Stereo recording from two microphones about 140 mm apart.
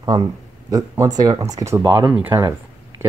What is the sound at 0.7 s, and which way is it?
Speech, 25° right (ahead or behind).